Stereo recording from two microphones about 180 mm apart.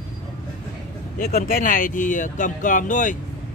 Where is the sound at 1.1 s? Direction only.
50° left (ahead or behind).